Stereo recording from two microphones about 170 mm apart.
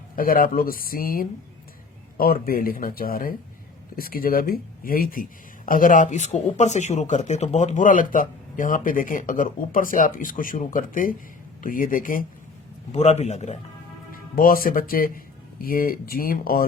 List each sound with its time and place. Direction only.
0.2 s speech: 55° left (ahead or behind)
12.9 s a man's voice: 40° left (ahead or behind)
14.1 s speech: 55° left (ahead or behind)